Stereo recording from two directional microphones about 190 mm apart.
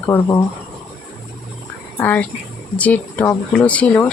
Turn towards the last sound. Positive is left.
turn(degrees=5)  # may be behind; listen again after turning